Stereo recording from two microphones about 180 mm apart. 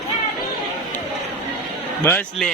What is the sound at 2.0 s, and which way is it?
Speech, 10° left (ahead or behind).